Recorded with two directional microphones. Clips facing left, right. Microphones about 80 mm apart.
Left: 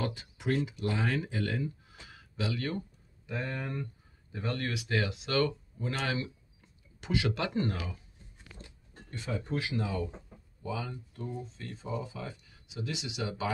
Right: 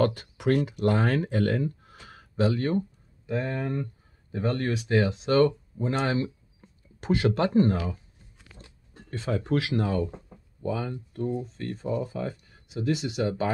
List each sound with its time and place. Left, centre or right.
0.0 s speech: right
9.3 s speech: right